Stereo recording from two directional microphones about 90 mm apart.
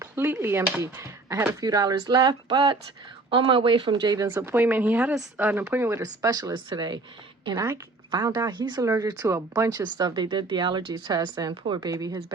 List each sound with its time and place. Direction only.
0.0 s speech: 30° right (ahead or behind)
1.6 s speech: 45° right (ahead or behind)
3.2 s speech: 75° right (ahead or behind); by 4.3 s 50° right (ahead or behind)
4.4 s speech: 25° right (ahead or behind)
6.0 s speech: 40° right (ahead or behind)
6.5 s speech: 55° right (ahead or behind)
8.1 s speech: 50° right (ahead or behind)
8.8 s speech: 40° right (ahead or behind)